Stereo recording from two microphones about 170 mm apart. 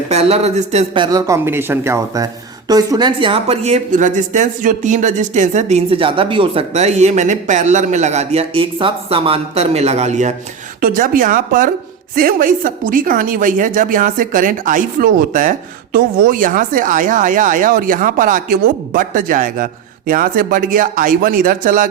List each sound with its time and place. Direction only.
0.1 s speech: 35° right (ahead or behind)
0.9 s a woman's voice: 25° right (ahead or behind); by 21.8 s 55° right (ahead or behind)